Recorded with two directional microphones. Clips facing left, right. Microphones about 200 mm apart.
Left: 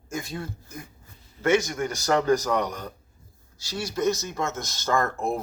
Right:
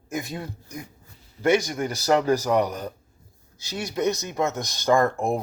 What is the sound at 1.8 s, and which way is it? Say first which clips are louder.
Speech: right 1 dB; 35° right (ahead or behind).